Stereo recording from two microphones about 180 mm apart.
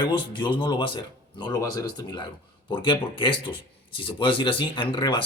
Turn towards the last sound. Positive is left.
turn(degrees=25)  # may be behind; listen again after turning